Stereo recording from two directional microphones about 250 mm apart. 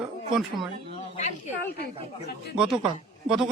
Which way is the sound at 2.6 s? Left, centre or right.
Centre.